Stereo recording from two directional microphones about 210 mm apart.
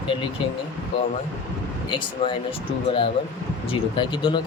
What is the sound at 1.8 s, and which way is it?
Speech, 25° left (ahead or behind).